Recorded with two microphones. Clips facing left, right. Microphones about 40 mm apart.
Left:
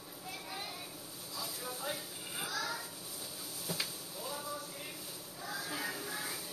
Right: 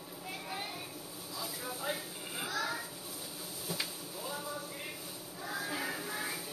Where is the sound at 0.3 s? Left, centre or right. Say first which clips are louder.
Right 3 dB; centre.